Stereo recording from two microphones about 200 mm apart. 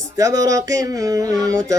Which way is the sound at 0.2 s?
15° right (ahead or behind).